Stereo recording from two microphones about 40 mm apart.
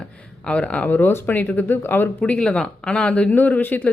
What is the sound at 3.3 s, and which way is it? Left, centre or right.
Speech, left.